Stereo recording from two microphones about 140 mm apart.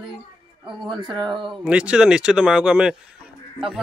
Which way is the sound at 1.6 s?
10° right (ahead or behind).